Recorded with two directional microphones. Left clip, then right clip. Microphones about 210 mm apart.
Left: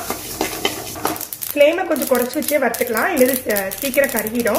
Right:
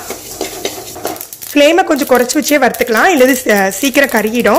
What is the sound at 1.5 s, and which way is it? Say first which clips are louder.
Speech: right 6 dB; 50° right (ahead or behind).